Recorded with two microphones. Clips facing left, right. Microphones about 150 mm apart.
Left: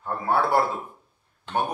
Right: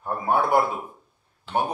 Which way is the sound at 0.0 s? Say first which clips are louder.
Right 1 dB; 15° right (ahead or behind).